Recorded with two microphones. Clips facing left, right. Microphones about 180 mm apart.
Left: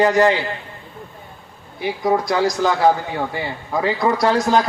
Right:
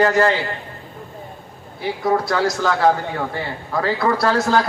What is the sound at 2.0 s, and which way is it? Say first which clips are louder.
A man's voice: left 1 dB; 15° left (ahead or behind).